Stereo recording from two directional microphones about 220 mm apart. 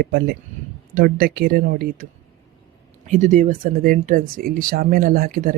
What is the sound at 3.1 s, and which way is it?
Speech, 35° right (ahead or behind).